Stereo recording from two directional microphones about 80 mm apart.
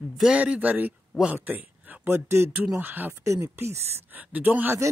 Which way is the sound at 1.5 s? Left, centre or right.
Right.